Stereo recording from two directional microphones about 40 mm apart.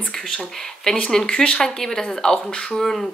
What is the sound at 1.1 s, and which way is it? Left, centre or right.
Speech, centre.